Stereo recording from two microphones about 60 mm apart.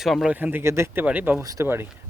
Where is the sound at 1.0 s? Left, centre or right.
Right.